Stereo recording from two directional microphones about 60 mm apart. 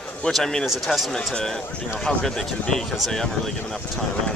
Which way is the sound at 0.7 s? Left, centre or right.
Centre.